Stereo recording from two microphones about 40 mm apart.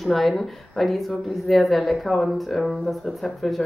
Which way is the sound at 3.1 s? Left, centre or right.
Centre.